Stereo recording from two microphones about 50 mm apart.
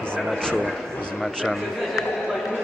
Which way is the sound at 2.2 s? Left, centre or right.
Centre.